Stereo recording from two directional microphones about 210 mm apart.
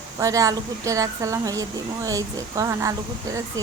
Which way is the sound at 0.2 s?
15° right (ahead or behind).